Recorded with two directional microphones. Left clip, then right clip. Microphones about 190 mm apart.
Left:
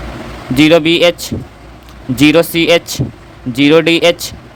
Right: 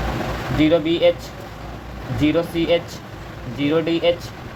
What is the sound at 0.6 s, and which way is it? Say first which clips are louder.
Speech: left 9 dB; 50° left (ahead or behind).